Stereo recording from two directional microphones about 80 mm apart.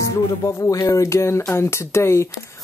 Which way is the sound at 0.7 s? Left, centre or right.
Left.